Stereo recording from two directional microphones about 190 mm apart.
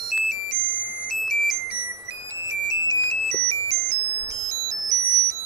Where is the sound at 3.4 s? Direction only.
30° right (ahead or behind).